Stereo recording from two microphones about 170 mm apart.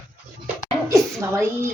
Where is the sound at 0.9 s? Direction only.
15° right (ahead or behind).